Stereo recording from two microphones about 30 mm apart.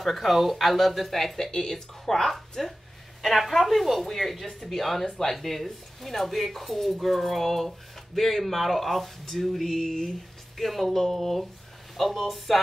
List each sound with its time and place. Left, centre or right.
0.0 s speech: centre
2.2 s speech: centre
9.8 s speech: centre